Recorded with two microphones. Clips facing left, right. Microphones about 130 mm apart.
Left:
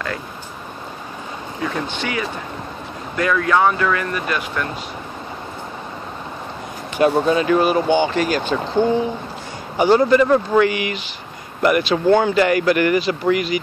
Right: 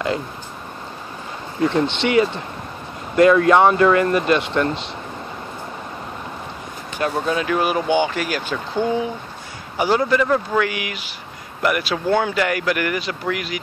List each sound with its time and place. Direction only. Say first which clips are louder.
1.6 s speech: right 6 dB; 25° right (ahead or behind)
7.0 s speech: left 6 dB; 5° left (ahead or behind)
9.8 s speech: left 4 dB; 5° right (ahead or behind)